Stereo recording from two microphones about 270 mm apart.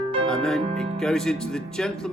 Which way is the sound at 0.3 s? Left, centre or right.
Centre.